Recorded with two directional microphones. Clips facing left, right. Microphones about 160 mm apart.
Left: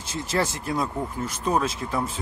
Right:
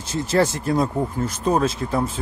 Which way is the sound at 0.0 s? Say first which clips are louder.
Right 6 dB; 40° right (ahead or behind).